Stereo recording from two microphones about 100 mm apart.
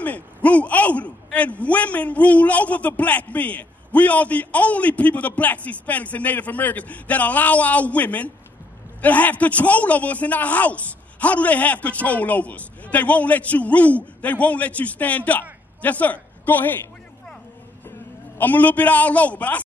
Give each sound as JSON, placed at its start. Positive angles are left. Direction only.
{"t": 0.0, "sound": "a man's voice", "side_deg": 15}
{"t": 18.4, "sound": "a man's voice", "side_deg": 15}